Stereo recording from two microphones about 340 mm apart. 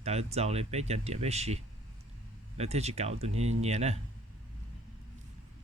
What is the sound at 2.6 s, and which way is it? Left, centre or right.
Speech, centre.